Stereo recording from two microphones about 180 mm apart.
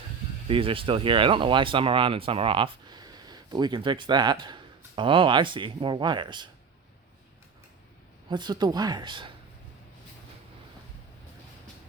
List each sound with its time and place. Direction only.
0.4 s speech: 30° right (ahead or behind)
8.3 s speech: 25° right (ahead or behind)